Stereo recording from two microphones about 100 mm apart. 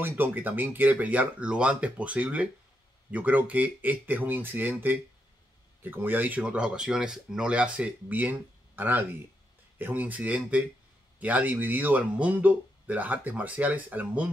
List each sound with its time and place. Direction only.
0.0 s speech: 20° right (ahead or behind)